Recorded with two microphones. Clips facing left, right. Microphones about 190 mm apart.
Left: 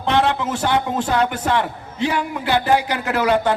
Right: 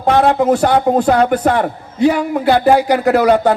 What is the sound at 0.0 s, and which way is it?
A man's voice, 45° right (ahead or behind).